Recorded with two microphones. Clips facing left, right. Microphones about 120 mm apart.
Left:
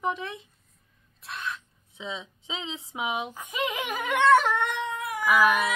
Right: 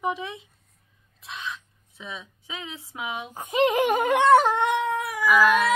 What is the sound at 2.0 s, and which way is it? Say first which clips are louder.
Speech: left 2 dB; 20° left (ahead or behind).